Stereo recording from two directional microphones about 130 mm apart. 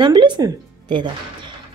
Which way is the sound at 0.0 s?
35° right (ahead or behind).